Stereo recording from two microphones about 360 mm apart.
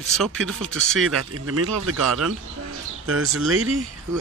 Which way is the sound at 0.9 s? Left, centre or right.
Right.